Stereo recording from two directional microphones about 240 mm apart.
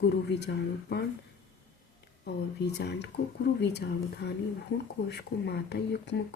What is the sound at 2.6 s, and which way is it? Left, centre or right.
Speech, left.